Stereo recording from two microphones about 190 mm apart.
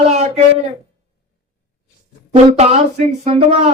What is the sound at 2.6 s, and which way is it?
Speech, 35° right (ahead or behind).